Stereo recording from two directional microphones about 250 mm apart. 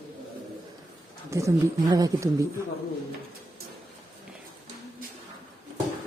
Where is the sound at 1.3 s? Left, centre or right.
Centre.